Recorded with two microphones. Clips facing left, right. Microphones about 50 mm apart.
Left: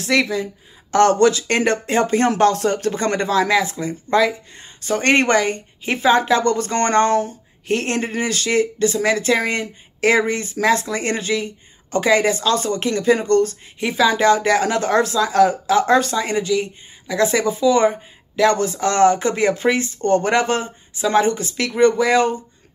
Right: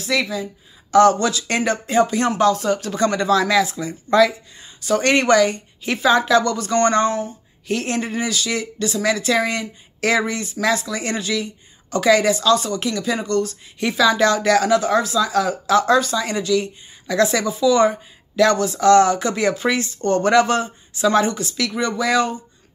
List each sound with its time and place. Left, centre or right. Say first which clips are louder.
0.0 s speech: left 3 dB; left
13.7 s speech: right 1 dB; left
14.8 s speech: left 1 dB; left
16.0 s speech: left 1 dB; left
16.3 s speech: even; left